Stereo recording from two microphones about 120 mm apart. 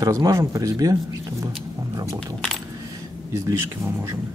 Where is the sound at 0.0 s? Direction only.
30° right (ahead or behind).